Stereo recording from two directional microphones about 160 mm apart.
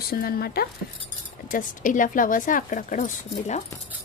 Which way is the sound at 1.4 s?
55° left (ahead or behind).